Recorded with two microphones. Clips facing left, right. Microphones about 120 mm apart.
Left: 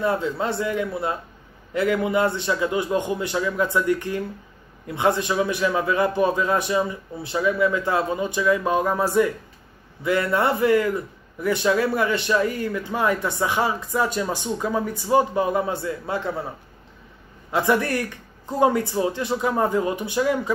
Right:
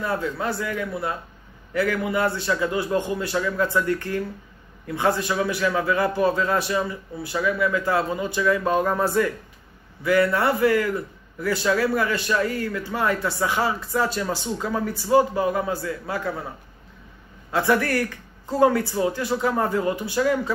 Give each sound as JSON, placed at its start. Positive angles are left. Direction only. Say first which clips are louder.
{"t": 0.0, "sound": "a man's voice", "louder": "left 3 dB", "side_deg": 25}
{"t": 17.5, "sound": "a man's voice", "louder": "even", "side_deg": 20}